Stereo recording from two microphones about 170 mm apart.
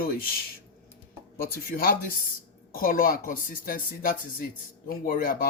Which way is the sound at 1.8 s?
55° left (ahead or behind).